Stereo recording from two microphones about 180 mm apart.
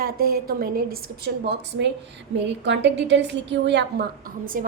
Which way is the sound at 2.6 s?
80° right.